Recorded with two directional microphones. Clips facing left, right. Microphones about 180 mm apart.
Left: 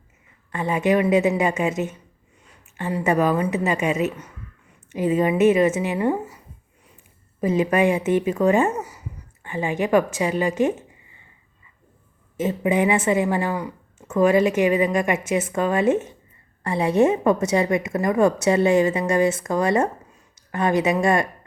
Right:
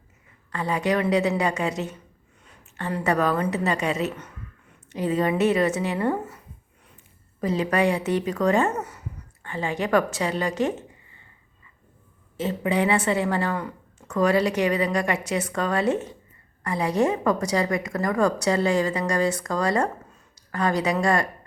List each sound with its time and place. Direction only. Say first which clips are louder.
0.5 s a woman's voice: left 4 dB; 20° left (ahead or behind)
7.4 s speech: left 3 dB; 20° left (ahead or behind)
12.4 s a woman's voice: left 3 dB; 15° left (ahead or behind)